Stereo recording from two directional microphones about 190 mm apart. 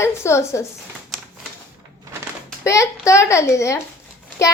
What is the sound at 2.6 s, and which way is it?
A woman's voice, 15° left (ahead or behind).